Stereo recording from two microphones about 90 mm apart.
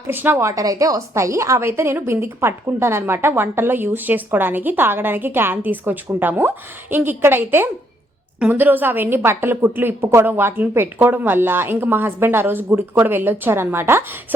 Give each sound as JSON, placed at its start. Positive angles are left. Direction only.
{"t": 0.1, "sound": "a woman's voice", "side_deg": -25}